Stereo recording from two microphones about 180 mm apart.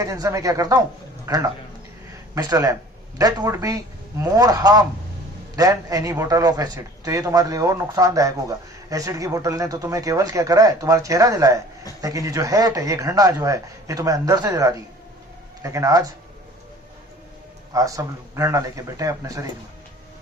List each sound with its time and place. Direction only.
0.0 s a man's voice: 20° right (ahead or behind)
17.7 s speech: 20° right (ahead or behind)